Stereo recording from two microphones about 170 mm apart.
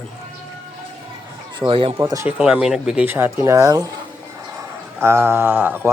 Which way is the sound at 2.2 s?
5° right (ahead or behind).